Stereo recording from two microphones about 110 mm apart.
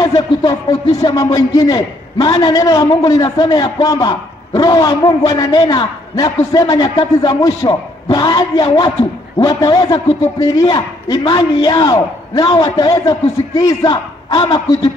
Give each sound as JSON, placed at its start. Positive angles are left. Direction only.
{"t": 0.0, "sound": "a man's voice", "side_deg": 35}